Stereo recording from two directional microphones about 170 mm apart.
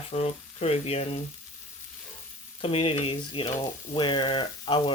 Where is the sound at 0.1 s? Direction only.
40° left (ahead or behind).